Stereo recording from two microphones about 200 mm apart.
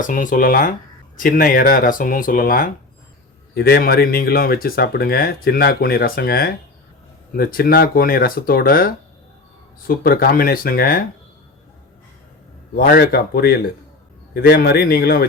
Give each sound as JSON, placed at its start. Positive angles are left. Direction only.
{"t": 0.0, "sound": "speech", "side_deg": 40}
{"t": 12.7, "sound": "speech", "side_deg": 50}